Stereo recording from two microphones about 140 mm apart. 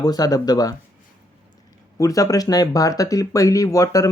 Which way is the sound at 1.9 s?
25° left (ahead or behind).